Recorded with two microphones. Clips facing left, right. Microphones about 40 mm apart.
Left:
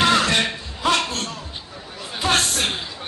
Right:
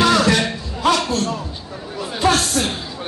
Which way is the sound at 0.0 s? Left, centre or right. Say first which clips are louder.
Right 3 dB; left.